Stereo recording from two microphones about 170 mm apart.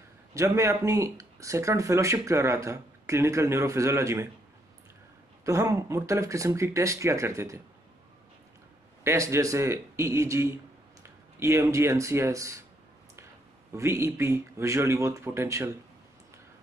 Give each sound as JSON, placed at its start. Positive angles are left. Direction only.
{"t": 0.3, "sound": "speech", "side_deg": -15}
{"t": 5.4, "sound": "speech", "side_deg": -20}
{"t": 9.0, "sound": "a man's voice", "side_deg": -15}
{"t": 13.7, "sound": "speech", "side_deg": -15}